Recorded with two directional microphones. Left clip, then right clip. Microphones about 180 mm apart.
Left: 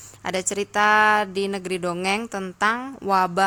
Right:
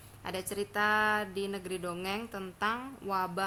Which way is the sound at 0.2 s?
45° left (ahead or behind).